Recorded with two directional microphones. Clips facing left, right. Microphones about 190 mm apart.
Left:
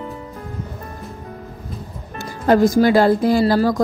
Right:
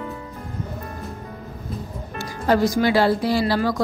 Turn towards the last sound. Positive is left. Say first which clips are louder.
# left 5 dB
turn(degrees=45)  # may be behind; listen again after turning